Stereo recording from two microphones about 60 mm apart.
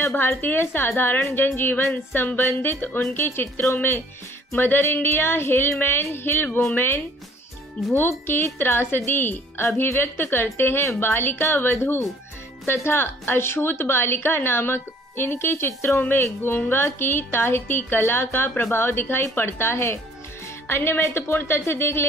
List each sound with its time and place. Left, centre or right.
0.0 s a woman's voice: left
8.5 s a woman's voice: left